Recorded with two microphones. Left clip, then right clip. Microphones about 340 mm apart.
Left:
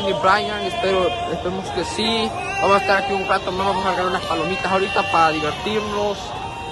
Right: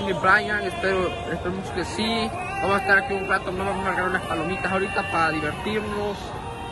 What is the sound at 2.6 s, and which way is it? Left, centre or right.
Speech, centre.